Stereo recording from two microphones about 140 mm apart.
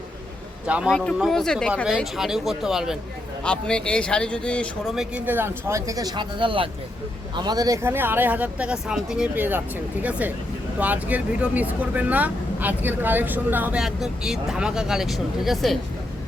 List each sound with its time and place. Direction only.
0.7 s speech: 5° right (ahead or behind)
1.7 s speech: 5° right (ahead or behind)
4.9 s speech: 10° right (ahead or behind)